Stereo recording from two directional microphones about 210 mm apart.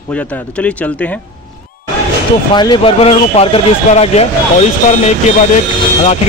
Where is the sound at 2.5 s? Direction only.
20° left (ahead or behind).